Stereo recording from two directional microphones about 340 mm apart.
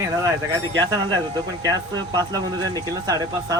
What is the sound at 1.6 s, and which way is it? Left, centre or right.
Speech, centre.